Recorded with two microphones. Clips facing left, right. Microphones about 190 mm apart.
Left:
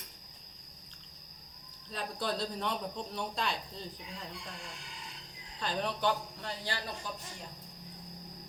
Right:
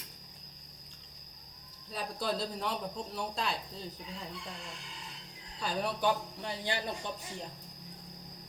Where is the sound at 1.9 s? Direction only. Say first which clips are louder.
Right 1 dB; 5° right (ahead or behind).